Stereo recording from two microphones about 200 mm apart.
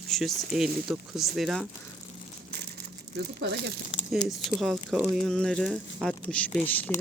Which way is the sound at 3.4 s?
60° right (ahead or behind).